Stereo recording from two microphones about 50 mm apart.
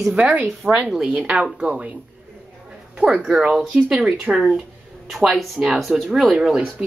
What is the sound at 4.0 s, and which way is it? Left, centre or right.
Speech, centre.